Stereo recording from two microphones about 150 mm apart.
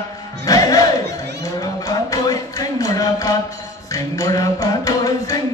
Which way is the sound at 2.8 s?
25° left (ahead or behind).